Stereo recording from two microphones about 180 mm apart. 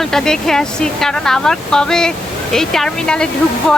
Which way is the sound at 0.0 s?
5° left (ahead or behind).